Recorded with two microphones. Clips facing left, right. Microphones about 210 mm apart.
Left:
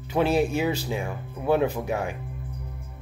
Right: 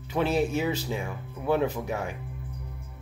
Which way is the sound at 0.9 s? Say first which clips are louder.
Left 3 dB; 45° left (ahead or behind).